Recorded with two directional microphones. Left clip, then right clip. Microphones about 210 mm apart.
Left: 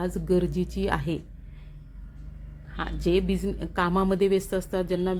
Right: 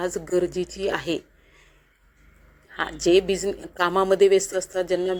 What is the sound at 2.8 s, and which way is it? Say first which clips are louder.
A woman's voice: right 6 dB; 25° right (ahead or behind).